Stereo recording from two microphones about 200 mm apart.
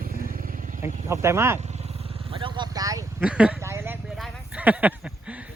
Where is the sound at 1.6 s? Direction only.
35° right (ahead or behind); by 3.0 s 15° right (ahead or behind).